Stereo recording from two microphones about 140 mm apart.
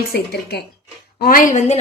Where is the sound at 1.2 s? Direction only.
90° left.